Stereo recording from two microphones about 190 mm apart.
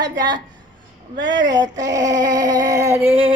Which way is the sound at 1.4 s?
20° right (ahead or behind).